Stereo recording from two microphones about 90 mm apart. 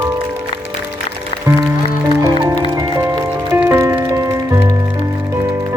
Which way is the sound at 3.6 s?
30° right (ahead or behind).